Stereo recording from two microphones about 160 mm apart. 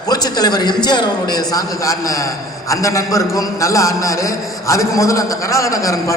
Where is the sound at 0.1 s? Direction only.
25° left (ahead or behind).